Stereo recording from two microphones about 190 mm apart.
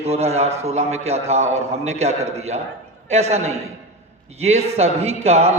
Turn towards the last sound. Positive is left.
turn(degrees=-35)  # may be behind; listen again after turning